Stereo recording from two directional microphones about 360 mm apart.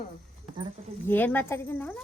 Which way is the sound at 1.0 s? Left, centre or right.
Centre.